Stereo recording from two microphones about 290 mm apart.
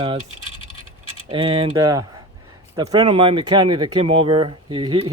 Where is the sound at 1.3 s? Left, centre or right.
Centre.